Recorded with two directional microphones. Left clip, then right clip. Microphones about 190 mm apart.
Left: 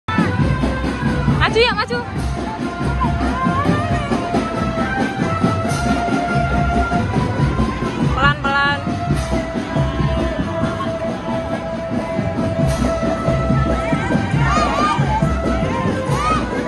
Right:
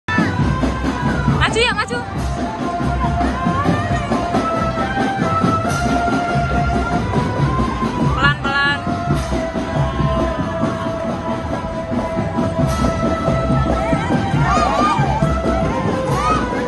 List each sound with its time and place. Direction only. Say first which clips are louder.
1.4 s music: left 2 dB; 10° right (ahead or behind)
8.2 s music: left 1 dB; centre (ahead or behind)
14.4 s music: right 1 dB; 30° right (ahead or behind)